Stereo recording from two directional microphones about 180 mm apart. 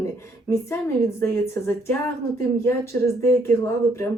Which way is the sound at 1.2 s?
10° left (ahead or behind).